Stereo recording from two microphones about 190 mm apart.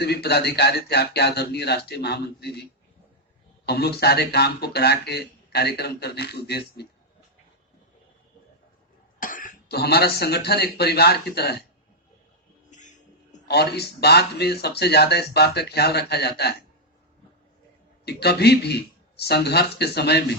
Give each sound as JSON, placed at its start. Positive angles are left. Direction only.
{"t": 0.0, "sound": "speech", "side_deg": 60}
{"t": 3.7, "sound": "speech", "side_deg": 60}
{"t": 9.2, "sound": "speech", "side_deg": 45}
{"t": 12.7, "sound": "music", "side_deg": 40}
{"t": 13.5, "sound": "speech", "side_deg": 60}
{"t": 18.0, "sound": "speech", "side_deg": 60}